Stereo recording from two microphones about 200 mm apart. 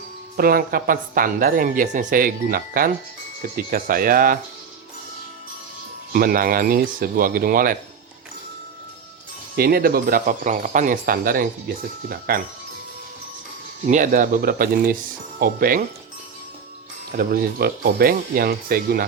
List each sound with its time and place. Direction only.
0.3 s speech: 50° right (ahead or behind)
6.1 s speech: 45° right (ahead or behind)
9.6 s speech: 50° right (ahead or behind)
13.8 s speech: 40° right (ahead or behind)
17.1 s speech: 45° right (ahead or behind)